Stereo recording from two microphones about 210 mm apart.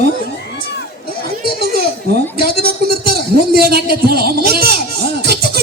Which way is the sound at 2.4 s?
50° right (ahead or behind).